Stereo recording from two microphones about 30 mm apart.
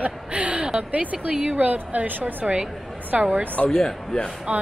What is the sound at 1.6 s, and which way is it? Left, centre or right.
Speech, right.